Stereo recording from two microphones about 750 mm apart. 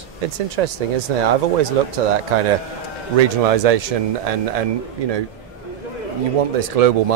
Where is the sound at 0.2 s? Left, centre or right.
Right.